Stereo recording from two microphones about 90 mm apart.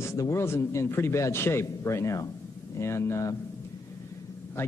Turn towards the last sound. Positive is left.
turn(degrees=25)  # may be behind; listen again after turning